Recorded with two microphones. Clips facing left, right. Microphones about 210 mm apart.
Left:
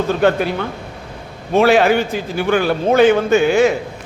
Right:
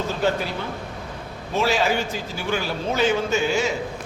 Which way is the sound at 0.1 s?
60° left (ahead or behind).